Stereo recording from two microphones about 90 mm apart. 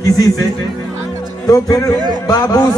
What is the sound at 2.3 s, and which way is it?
Speech, 40° left (ahead or behind).